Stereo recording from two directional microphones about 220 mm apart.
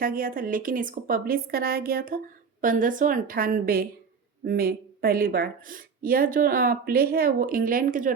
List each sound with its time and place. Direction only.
0.0 s a woman's voice: 40° right (ahead or behind)